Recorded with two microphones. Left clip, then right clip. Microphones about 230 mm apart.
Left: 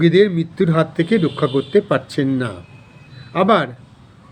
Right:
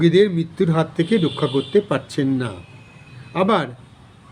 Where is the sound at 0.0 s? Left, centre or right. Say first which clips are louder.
Left 2 dB; centre.